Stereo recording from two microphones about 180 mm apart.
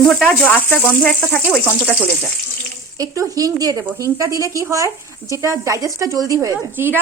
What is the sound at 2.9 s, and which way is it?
A woman's voice, 20° right (ahead or behind).